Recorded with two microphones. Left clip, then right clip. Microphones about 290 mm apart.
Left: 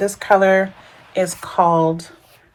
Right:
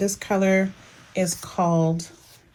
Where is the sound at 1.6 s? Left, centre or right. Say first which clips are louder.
Left 8 dB; centre.